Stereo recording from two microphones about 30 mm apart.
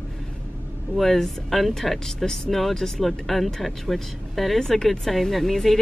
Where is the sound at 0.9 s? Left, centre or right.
Centre.